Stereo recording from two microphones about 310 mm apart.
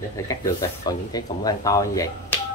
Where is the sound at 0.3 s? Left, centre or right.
Centre.